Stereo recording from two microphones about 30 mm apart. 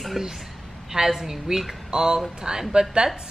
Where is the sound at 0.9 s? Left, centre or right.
Centre; by 3.0 s right.